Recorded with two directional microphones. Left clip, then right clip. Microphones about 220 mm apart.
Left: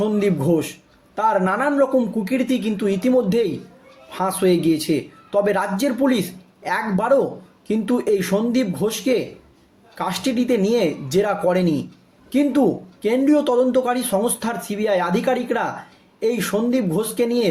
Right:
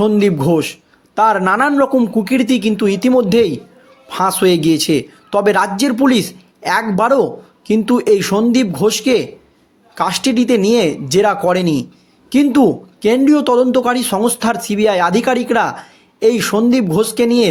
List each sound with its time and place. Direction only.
0.0 s speech: 45° right (ahead or behind)